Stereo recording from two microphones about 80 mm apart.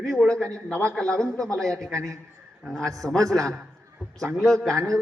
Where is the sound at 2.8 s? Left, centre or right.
Right.